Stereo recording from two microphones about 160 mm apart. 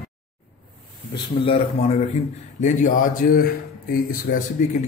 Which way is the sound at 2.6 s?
50° left (ahead or behind).